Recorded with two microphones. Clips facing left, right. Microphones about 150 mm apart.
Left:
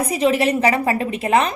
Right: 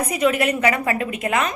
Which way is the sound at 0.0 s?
30° left (ahead or behind).